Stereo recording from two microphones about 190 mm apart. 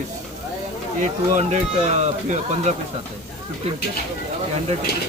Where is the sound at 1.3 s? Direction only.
35° right (ahead or behind).